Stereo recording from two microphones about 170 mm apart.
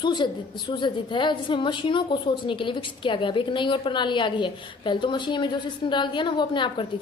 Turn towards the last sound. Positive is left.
turn(degrees=25)  # may be behind; listen again after turning